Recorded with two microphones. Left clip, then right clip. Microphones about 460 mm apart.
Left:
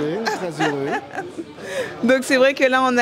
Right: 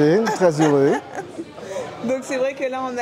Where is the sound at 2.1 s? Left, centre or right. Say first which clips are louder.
Left 7 dB; left.